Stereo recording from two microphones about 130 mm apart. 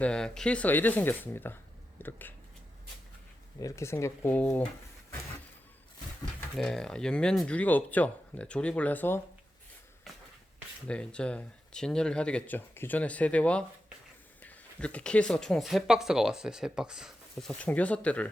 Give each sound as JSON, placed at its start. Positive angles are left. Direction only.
{"t": 0.0, "sound": "speech", "side_deg": 5}
{"t": 3.6, "sound": "speech", "side_deg": 25}
{"t": 6.6, "sound": "speech", "side_deg": 5}
{"t": 10.8, "sound": "speech", "side_deg": 10}
{"t": 17.3, "sound": "speech", "side_deg": 5}